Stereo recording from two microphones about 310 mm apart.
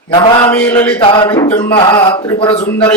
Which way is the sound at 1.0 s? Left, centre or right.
Centre.